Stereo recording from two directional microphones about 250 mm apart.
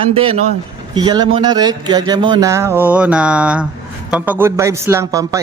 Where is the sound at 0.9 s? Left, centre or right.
Centre.